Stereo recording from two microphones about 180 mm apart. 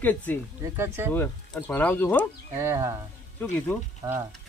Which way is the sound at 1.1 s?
10° left (ahead or behind).